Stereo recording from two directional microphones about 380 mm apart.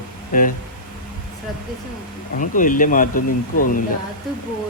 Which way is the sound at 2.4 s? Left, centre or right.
Left.